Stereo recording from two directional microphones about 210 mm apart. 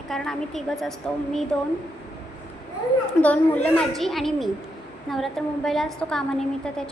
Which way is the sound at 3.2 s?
5° left (ahead or behind).